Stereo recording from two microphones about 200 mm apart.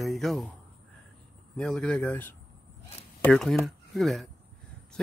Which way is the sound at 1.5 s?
5° left (ahead or behind).